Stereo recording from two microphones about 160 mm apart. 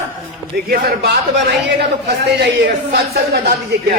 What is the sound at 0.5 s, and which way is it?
A man's voice, 70° right (ahead or behind).